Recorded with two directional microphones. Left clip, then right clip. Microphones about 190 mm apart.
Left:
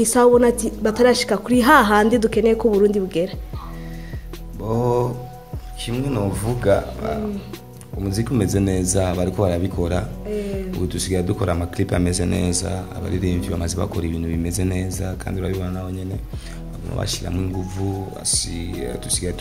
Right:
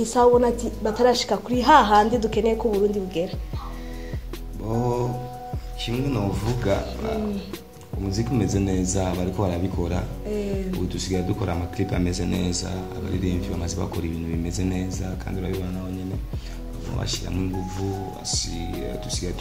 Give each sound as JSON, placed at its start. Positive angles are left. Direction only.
{"t": 0.0, "sound": "a woman's voice", "side_deg": 40}
{"t": 4.6, "sound": "a woman's voice", "side_deg": 40}
{"t": 17.0, "sound": "a woman's voice", "side_deg": 45}